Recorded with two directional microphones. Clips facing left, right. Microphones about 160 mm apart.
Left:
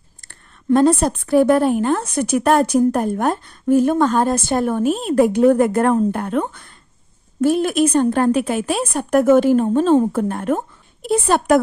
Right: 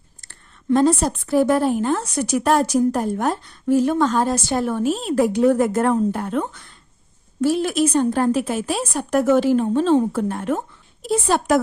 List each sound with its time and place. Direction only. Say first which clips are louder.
0.2 s a woman's voice: left 2 dB; 55° left (ahead or behind)